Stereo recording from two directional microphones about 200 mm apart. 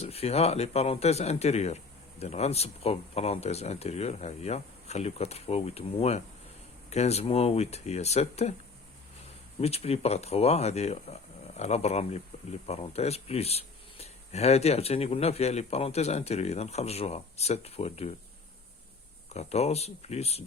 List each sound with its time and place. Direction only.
0.0 s speech: 30° left (ahead or behind)
9.6 s speech: 30° left (ahead or behind)
19.3 s speech: 30° left (ahead or behind)